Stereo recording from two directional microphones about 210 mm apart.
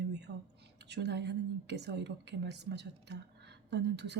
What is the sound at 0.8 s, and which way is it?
A woman's voice, 55° right (ahead or behind).